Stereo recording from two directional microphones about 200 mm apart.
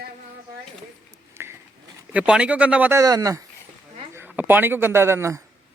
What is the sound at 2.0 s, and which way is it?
A man's voice, 5° right (ahead or behind).